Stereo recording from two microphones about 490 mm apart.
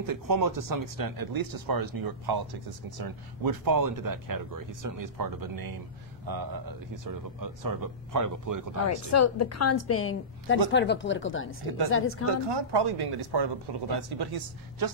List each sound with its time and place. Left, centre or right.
0.0 s speech: right
9.1 s a woman's voice: left
12.4 s speech: right